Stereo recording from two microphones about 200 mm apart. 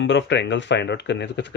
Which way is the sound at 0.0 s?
65° left (ahead or behind).